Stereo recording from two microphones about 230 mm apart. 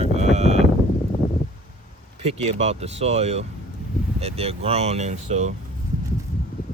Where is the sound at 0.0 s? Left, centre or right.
Right.